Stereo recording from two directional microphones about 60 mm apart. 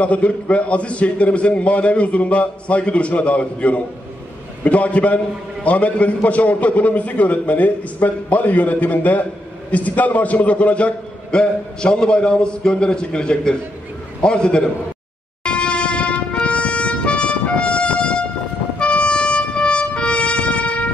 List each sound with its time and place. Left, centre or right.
0.0 s a man's voice: left
15.4 s music: centre